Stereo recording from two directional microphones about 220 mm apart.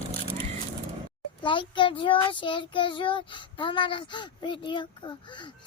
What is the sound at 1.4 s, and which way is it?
A child's voice, 20° left (ahead or behind).